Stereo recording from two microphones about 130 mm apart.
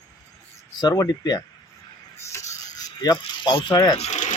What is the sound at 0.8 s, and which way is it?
Speech, 30° left (ahead or behind).